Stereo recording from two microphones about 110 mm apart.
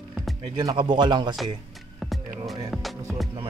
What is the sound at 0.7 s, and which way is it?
Speech, 45° right (ahead or behind).